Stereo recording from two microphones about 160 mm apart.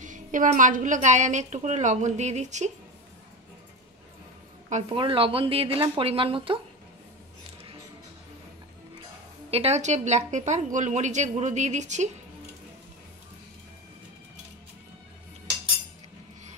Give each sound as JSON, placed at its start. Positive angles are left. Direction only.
{"t": 0.0, "sound": "a woman's voice", "side_deg": -55}
{"t": 4.8, "sound": "speech", "side_deg": -35}
{"t": 9.5, "sound": "a woman's voice", "side_deg": -40}